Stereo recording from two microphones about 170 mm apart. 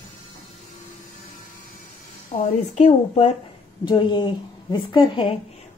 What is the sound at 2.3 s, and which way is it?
A woman's voice, 45° left (ahead or behind).